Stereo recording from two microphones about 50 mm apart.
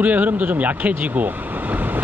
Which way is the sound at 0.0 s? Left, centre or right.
Right.